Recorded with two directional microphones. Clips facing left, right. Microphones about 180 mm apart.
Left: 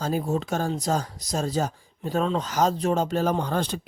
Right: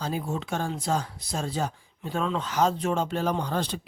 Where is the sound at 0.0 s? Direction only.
40° left (ahead or behind).